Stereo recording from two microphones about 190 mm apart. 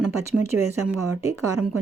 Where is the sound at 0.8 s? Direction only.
10° right (ahead or behind).